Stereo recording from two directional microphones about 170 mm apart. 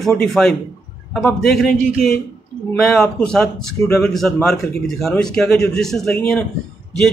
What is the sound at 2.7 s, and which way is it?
A man's voice, centre (ahead or behind).